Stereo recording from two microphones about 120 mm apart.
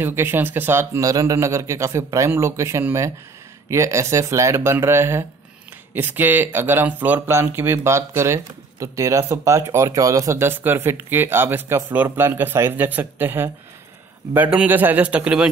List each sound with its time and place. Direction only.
0.0 s a man's voice: 20° right (ahead or behind)